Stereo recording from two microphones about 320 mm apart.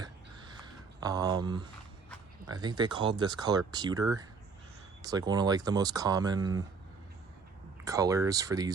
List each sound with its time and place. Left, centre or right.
0.0 s a sound: centre
2.5 s speech: centre
7.9 s speech: centre